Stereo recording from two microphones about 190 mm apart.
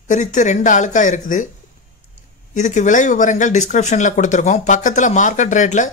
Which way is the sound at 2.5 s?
40° left (ahead or behind).